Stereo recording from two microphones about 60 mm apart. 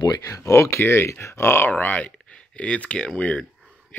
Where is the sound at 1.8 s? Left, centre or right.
Left.